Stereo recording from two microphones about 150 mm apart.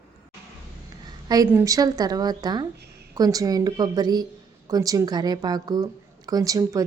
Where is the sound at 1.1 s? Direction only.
25° right (ahead or behind).